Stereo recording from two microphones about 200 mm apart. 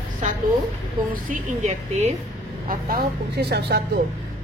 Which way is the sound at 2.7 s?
50° right (ahead or behind).